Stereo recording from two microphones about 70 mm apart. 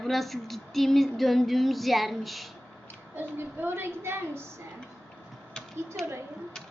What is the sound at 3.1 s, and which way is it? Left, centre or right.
Child singing, right.